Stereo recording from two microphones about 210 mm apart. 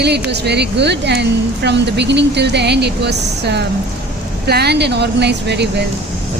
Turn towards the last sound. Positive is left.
turn(degrees=-55)  # may be behind; listen again after turning